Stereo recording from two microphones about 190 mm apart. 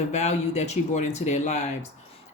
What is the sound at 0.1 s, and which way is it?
A woman's voice, 35° left (ahead or behind).